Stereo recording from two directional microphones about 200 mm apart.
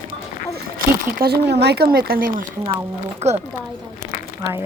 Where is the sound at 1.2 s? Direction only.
55° right (ahead or behind).